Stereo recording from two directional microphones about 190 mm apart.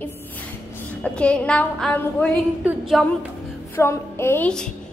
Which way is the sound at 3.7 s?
15° left (ahead or behind).